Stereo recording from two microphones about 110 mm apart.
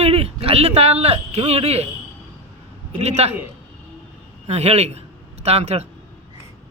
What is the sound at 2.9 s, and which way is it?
Speech, 80° right.